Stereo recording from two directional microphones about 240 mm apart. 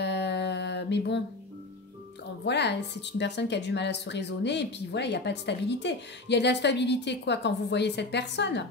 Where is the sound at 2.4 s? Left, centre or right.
Left.